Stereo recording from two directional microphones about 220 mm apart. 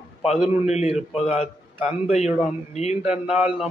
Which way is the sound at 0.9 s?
5° right (ahead or behind).